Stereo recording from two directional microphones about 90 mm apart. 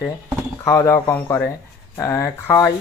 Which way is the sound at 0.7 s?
35° left (ahead or behind).